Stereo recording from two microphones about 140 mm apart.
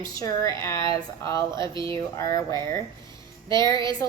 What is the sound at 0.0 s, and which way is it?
A woman's voice, 25° left (ahead or behind).